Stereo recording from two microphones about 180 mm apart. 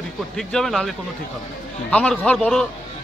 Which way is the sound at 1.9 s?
5° left (ahead or behind).